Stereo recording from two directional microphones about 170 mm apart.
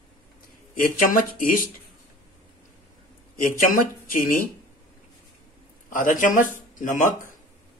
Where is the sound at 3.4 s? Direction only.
55° left (ahead or behind).